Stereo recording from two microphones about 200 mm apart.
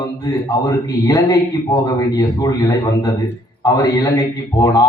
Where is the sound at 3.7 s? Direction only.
15° left (ahead or behind).